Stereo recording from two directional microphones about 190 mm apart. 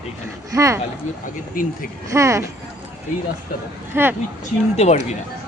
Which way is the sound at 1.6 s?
45° left (ahead or behind).